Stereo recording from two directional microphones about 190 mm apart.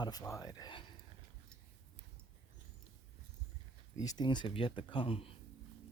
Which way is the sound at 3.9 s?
20° left (ahead or behind).